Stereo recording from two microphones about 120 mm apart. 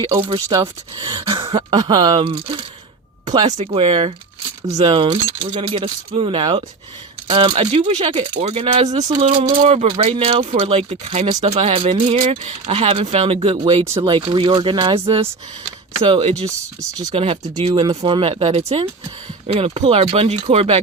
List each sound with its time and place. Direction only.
0.2 s speech: 45° right (ahead or behind)
0.4 s speech: 25° right (ahead or behind)
0.9 s speech: 40° right (ahead or behind)
1.7 s speech: 35° right (ahead or behind)
3.4 s speech: 55° right (ahead or behind)
9.2 s speech: 50° right (ahead or behind)
9.6 s speech: 65° right (ahead or behind)
11.4 s speech: 50° right (ahead or behind)
12.1 s speech: 65° right (ahead or behind); by 16.3 s 45° right (ahead or behind)
17.1 s speech: 55° right (ahead or behind)
17.8 s speech: 35° right (ahead or behind)
18.2 s speech: 55° right (ahead or behind)